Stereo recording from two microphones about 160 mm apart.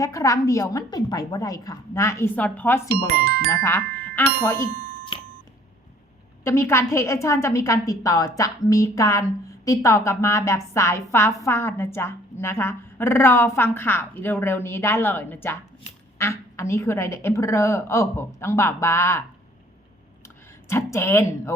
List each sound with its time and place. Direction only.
0.0 s a woman's voice: 20° left (ahead or behind)
3.1 s speech: 70° right (ahead or behind)
3.5 s speech: 15° left (ahead or behind)
6.4 s a woman's voice: 15° left (ahead or behind)
20.7 s a woman's voice: 15° left (ahead or behind)